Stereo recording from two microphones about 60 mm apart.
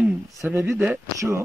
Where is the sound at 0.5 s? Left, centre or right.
Right.